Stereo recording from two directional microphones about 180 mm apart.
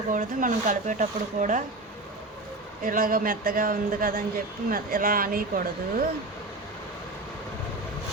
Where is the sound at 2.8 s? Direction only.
50° right (ahead or behind).